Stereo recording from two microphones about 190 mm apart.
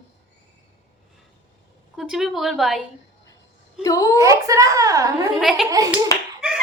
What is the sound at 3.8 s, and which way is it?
Speech, 20° left (ahead or behind).